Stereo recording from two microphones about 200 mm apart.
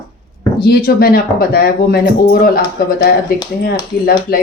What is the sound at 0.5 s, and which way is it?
Speech, 50° left (ahead or behind).